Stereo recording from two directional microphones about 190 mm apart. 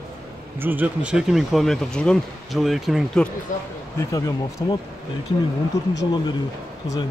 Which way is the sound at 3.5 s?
45° left (ahead or behind).